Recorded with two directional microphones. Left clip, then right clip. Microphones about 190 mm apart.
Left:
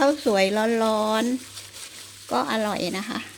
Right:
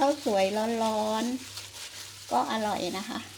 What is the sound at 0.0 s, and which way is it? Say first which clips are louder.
Speech: left 5 dB; 40° left (ahead or behind).